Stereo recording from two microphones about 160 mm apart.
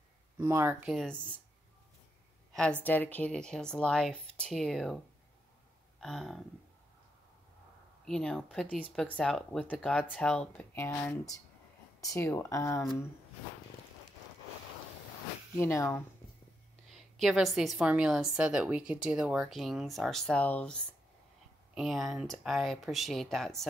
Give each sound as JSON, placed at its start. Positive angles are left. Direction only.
{"t": 0.4, "sound": "speech", "side_deg": -15}
{"t": 0.8, "sound": "speech", "side_deg": 5}
{"t": 2.5, "sound": "a woman's voice", "side_deg": 5}
{"t": 5.9, "sound": "a sound", "side_deg": 0}
{"t": 8.0, "sound": "a woman's voice", "side_deg": 5}
{"t": 15.5, "sound": "speech", "side_deg": 15}
{"t": 16.9, "sound": "a woman's voice", "side_deg": 0}